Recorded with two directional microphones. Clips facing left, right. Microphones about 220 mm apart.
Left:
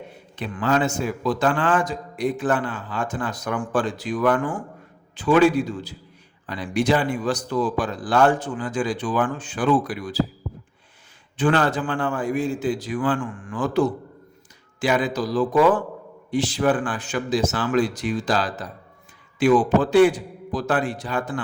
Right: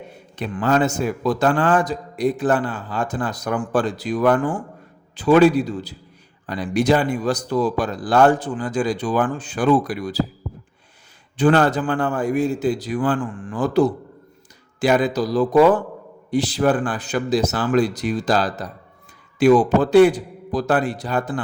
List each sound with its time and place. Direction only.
0.3 s a man's voice: 45° right (ahead or behind)
11.3 s a man's voice: 40° right (ahead or behind)